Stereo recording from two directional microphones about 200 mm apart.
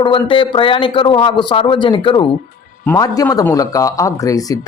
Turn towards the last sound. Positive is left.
turn(degrees=15)  # may be behind; listen again after turning